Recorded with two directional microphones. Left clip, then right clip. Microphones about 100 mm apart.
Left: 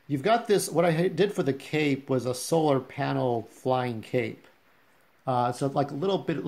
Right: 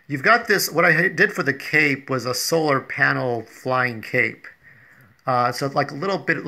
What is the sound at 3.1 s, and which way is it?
Speech, 50° right (ahead or behind).